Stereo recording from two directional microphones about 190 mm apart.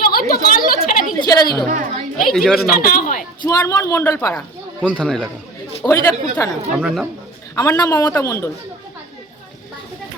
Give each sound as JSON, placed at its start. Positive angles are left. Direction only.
{"t": 0.1, "sound": "a sound", "side_deg": 50}
{"t": 1.3, "sound": "a woman's voice", "side_deg": 20}
{"t": 1.6, "sound": "a child's voice", "side_deg": -40}
{"t": 2.1, "sound": "a woman's voice", "side_deg": 0}
{"t": 2.8, "sound": "speech", "side_deg": 50}
{"t": 3.4, "sound": "speech", "side_deg": 15}
{"t": 4.4, "sound": "speech", "side_deg": 0}
{"t": 5.8, "sound": "speech", "side_deg": 15}
{"t": 6.7, "sound": "a woman's voice", "side_deg": -5}
{"t": 7.5, "sound": "speech", "side_deg": 15}